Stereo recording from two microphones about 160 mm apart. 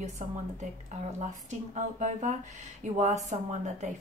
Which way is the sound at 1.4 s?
50° right (ahead or behind).